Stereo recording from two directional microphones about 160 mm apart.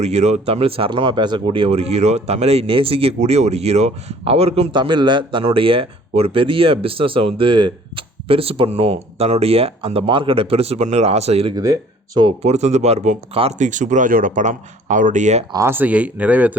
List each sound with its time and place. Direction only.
0.0 s speech: 45° right (ahead or behind)
15.5 s speech: 15° right (ahead or behind)